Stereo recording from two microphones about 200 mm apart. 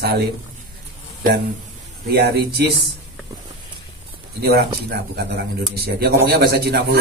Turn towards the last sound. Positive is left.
turn(degrees=-50)  # may be behind; listen again after turning